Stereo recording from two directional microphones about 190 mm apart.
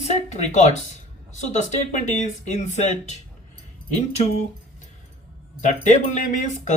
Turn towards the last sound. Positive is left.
turn(degrees=40)  # may be behind; listen again after turning